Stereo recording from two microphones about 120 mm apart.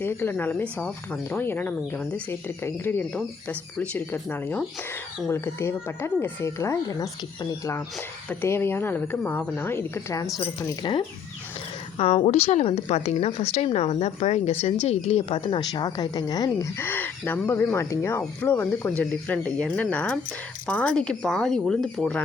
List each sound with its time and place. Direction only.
0.0 s speech: 20° left (ahead or behind)
8.3 s speech: 20° left (ahead or behind)
11.9 s a woman's voice: 55° left (ahead or behind); by 16.6 s 30° left (ahead or behind)
16.7 s speech: 15° left (ahead or behind); by 22.0 s centre (ahead or behind)